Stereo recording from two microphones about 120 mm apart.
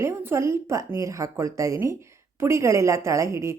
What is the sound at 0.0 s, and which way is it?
A woman's voice, 20° right (ahead or behind).